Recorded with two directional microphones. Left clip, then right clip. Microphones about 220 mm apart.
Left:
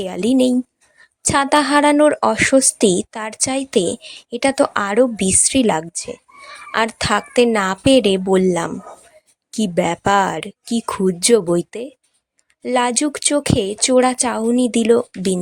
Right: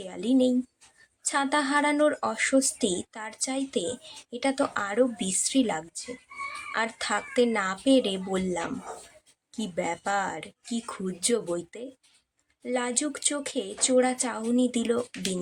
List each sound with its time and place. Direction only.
0.0 s a woman's voice: 40° left (ahead or behind)